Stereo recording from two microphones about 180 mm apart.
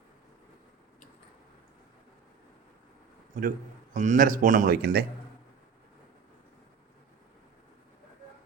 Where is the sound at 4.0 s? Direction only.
45° right (ahead or behind).